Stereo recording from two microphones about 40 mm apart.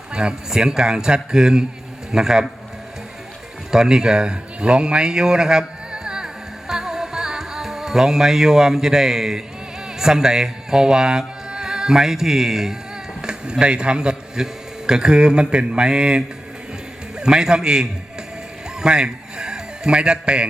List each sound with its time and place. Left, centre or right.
0.1 s a man's voice: right
3.7 s a sound: centre
10.0 s speech: centre
13.2 s a man's voice: right
18.8 s music: right